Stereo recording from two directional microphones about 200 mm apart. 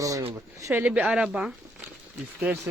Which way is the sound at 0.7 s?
10° right (ahead or behind).